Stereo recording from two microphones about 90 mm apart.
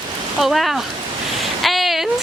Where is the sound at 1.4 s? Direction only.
Centre (ahead or behind).